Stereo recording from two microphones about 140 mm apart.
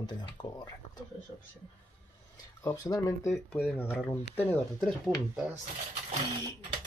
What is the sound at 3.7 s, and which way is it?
Speech, 10° left (ahead or behind).